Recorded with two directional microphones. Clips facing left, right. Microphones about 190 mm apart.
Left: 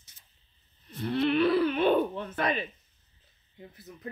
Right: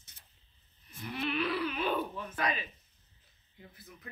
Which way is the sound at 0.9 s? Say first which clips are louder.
Left 11 dB; 65° left (ahead or behind).